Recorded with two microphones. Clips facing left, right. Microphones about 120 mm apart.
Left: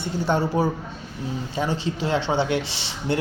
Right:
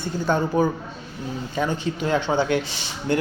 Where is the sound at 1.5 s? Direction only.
30° left (ahead or behind).